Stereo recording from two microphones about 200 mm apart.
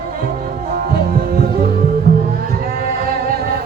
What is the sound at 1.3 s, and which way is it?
Music, 50° right (ahead or behind).